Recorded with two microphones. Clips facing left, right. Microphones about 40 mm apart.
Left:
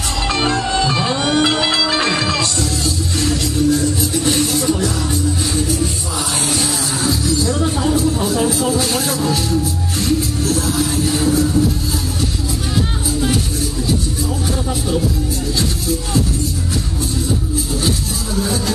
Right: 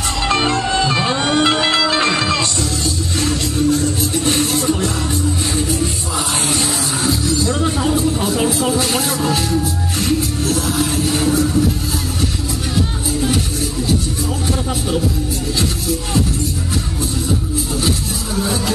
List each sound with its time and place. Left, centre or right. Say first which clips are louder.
0.7 s music: right 1 dB; centre
2.0 s music: right 1 dB; centre
3.2 s music: even; right
6.5 s music: even; right
17.8 s music: even; right